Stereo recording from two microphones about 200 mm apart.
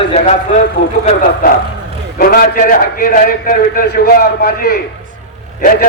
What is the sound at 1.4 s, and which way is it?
A man's voice, 45° left (ahead or behind).